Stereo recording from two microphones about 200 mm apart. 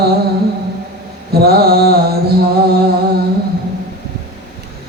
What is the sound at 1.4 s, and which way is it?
Mantra, 50° right (ahead or behind).